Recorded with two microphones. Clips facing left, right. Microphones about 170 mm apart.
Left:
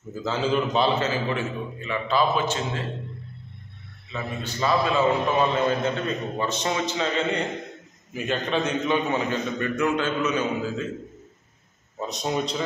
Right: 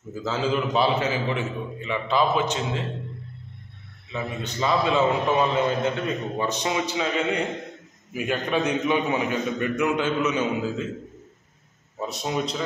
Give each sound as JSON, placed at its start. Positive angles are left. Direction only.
{"t": 0.1, "sound": "a man's voice", "side_deg": -5}
{"t": 4.1, "sound": "a man's voice", "side_deg": -20}
{"t": 12.1, "sound": "a man's voice", "side_deg": -5}